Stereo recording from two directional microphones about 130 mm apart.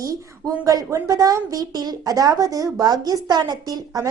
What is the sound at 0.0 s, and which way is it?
A woman's voice, 25° right (ahead or behind).